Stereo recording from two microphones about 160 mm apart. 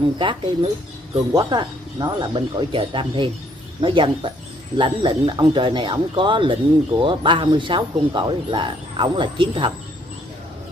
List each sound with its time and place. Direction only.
0.2 s speech: 30° right (ahead or behind)